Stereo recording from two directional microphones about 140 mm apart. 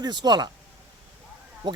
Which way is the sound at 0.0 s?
30° right (ahead or behind).